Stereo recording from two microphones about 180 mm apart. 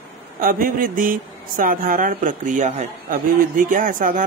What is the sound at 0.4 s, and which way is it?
Speech, 50° right (ahead or behind).